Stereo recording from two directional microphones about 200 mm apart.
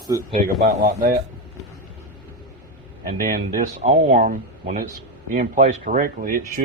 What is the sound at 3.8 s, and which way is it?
Speech, 30° right (ahead or behind).